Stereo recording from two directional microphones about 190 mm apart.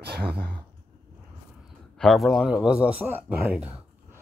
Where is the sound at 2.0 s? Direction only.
Centre (ahead or behind).